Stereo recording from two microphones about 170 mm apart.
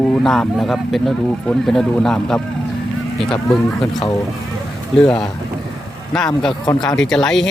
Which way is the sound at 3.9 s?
25° left (ahead or behind).